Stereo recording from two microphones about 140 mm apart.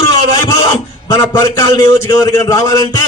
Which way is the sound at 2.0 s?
30° left (ahead or behind).